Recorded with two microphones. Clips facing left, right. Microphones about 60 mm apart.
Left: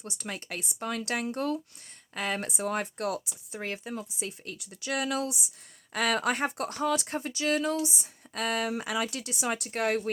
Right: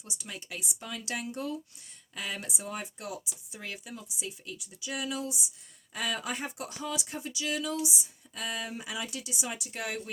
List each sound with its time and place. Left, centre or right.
0.0 s speech: left
3.6 s speech: left